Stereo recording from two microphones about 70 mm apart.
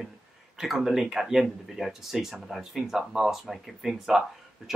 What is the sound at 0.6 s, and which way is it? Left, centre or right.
Speech, centre.